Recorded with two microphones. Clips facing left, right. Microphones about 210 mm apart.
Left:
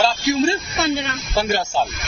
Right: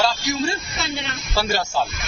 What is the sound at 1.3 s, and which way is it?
Speech, 20° left (ahead or behind).